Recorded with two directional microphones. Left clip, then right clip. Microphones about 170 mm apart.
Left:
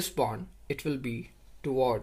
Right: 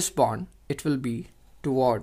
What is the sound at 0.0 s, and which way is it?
Speech, 55° right (ahead or behind).